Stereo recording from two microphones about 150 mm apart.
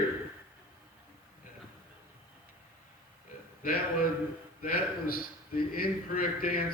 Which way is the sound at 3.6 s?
70° left (ahead or behind).